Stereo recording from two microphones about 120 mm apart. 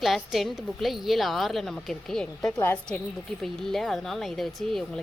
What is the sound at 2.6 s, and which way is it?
Speech, 15° left (ahead or behind).